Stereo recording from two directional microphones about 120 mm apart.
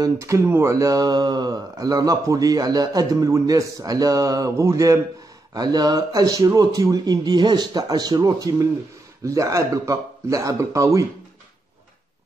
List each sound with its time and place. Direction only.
0.0 s speech: 25° right (ahead or behind)